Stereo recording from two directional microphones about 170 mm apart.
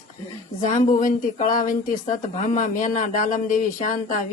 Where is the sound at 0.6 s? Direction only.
50° left (ahead or behind).